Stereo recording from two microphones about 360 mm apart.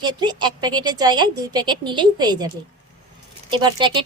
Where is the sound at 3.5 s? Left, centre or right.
Centre.